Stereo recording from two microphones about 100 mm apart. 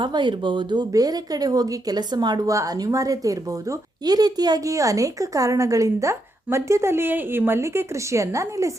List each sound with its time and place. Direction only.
0.0 s a woman's voice: 50° right (ahead or behind); by 8.7 s 30° right (ahead or behind)